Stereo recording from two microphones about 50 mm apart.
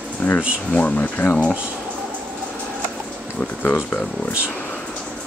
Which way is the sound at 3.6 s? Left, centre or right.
Left.